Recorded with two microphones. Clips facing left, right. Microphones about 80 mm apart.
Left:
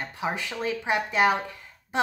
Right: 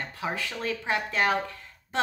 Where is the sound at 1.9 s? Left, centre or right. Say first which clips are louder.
Left 2 dB; centre.